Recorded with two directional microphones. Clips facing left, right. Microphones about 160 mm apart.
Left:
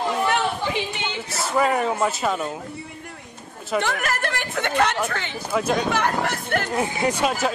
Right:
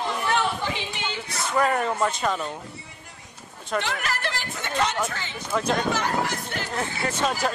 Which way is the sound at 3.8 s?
50° left (ahead or behind).